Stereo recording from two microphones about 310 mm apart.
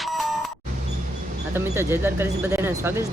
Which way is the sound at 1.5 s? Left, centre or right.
Centre.